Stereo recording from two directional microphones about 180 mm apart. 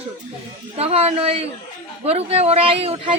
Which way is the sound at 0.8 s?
35° right (ahead or behind).